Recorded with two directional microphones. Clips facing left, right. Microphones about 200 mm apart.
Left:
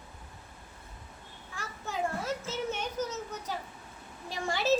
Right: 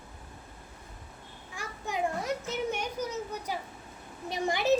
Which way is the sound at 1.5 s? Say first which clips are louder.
Right 2 dB; 15° right (ahead or behind).